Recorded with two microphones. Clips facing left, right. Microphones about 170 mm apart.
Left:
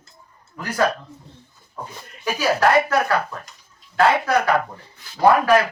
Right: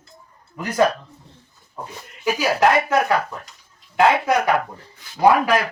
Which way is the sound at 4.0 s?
15° right (ahead or behind).